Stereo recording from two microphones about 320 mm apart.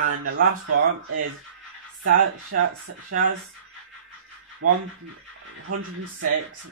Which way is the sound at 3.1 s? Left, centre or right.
Right.